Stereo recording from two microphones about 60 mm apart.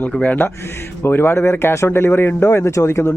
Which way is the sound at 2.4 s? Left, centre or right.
Left.